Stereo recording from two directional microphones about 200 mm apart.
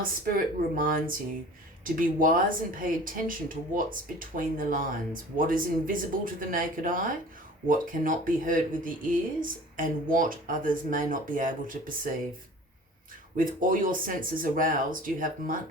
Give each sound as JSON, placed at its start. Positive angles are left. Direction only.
{"t": 0.0, "sound": "speech", "side_deg": -45}
{"t": 13.3, "sound": "speech", "side_deg": -45}